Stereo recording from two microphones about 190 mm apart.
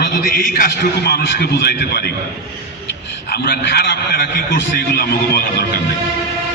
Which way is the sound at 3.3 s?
55° left (ahead or behind).